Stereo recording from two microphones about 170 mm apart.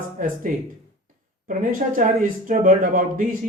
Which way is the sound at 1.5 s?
50° right (ahead or behind).